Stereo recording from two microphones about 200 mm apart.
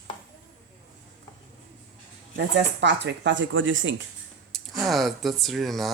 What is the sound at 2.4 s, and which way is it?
Speech, 60° right (ahead or behind).